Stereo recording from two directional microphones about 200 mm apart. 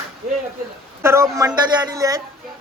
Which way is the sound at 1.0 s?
15° right (ahead or behind).